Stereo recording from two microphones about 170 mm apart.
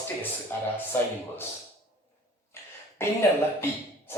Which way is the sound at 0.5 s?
10° left (ahead or behind).